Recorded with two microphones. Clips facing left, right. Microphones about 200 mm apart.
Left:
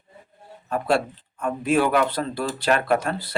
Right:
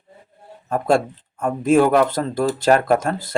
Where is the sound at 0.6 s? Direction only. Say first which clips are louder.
Right 4 dB; 45° right (ahead or behind).